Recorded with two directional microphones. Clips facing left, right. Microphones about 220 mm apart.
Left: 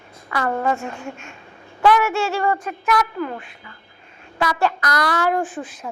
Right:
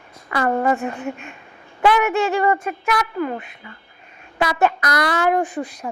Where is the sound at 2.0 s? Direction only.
15° right (ahead or behind).